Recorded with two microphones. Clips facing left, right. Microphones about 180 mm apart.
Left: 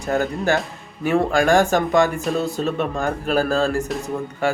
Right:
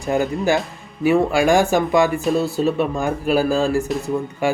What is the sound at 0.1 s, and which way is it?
Speech, 10° right (ahead or behind).